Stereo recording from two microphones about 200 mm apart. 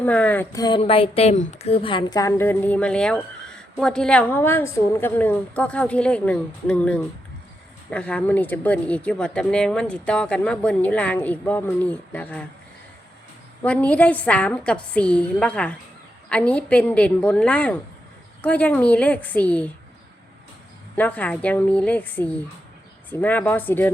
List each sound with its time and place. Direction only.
0.0 s speech: 10° left (ahead or behind)
13.6 s speech: 5° left (ahead or behind)
20.9 s speech: 10° left (ahead or behind)